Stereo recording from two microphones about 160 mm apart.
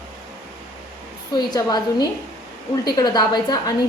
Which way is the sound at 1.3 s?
25° left (ahead or behind).